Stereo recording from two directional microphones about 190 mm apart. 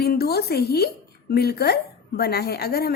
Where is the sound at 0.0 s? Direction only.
55° left (ahead or behind).